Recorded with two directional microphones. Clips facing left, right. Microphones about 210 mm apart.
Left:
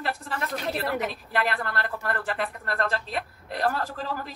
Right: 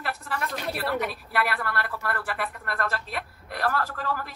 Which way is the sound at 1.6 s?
20° left (ahead or behind).